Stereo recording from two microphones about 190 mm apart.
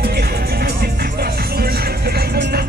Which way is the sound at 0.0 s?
55° right (ahead or behind).